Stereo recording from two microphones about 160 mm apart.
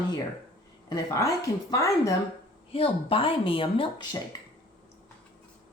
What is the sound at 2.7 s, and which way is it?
Speech, 35° left (ahead or behind).